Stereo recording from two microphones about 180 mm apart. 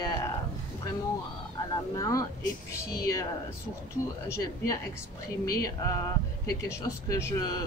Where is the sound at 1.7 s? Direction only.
20° left (ahead or behind).